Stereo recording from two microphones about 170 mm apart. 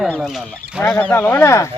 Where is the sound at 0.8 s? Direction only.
10° left (ahead or behind).